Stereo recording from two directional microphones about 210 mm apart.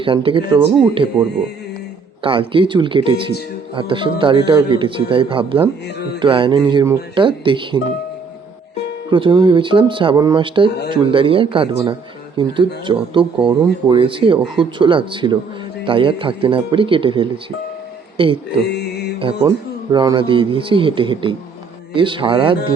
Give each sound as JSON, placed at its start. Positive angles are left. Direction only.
{"t": 0.0, "sound": "speech", "side_deg": -25}
{"t": 2.2, "sound": "speech", "side_deg": -25}
{"t": 9.0, "sound": "speech", "side_deg": -25}
{"t": 19.5, "sound": "speech", "side_deg": -20}